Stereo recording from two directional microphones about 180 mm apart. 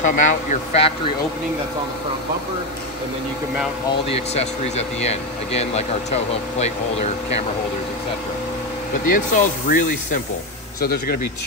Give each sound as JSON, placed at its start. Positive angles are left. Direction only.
{"t": 0.0, "sound": "speech", "side_deg": 45}
{"t": 4.1, "sound": "speech", "side_deg": 35}
{"t": 9.1, "sound": "speech", "side_deg": 45}
{"t": 10.8, "sound": "a man's voice", "side_deg": 60}